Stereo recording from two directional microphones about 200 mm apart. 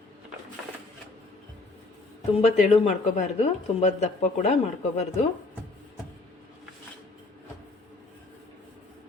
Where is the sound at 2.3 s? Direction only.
30° left (ahead or behind).